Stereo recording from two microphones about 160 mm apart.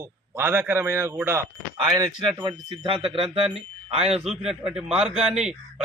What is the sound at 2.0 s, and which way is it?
Speech, 30° right (ahead or behind).